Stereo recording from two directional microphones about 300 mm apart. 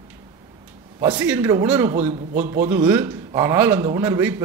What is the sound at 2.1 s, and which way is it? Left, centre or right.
Speech, right.